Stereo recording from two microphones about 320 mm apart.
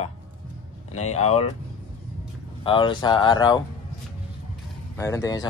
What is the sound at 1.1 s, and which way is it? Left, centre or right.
Speech, centre.